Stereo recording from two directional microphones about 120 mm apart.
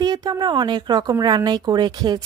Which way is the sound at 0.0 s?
35° right (ahead or behind).